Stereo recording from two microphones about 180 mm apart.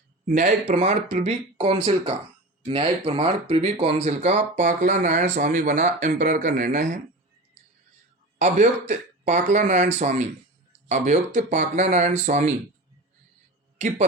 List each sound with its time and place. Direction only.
0.3 s speech: 45° right (ahead or behind)
8.4 s speech: 40° right (ahead or behind)
13.7 s speech: 40° right (ahead or behind)